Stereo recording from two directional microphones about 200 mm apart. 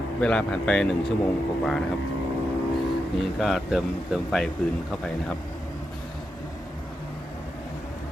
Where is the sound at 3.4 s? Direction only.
Centre (ahead or behind).